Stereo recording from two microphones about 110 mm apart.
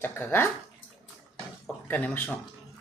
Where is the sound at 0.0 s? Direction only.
20° left (ahead or behind).